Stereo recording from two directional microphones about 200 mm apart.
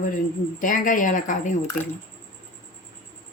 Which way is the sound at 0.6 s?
40° left (ahead or behind).